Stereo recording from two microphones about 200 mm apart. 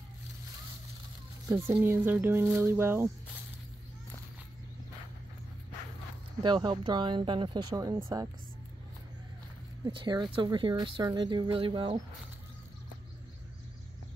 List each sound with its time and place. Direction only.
1.5 s speech: 15° right (ahead or behind)
6.4 s speech: 20° right (ahead or behind)
9.8 s speech: 20° right (ahead or behind)